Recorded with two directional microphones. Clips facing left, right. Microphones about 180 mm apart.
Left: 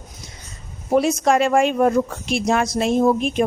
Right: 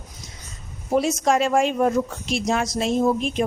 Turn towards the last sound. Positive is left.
turn(degrees=55)  # may be behind; listen again after turning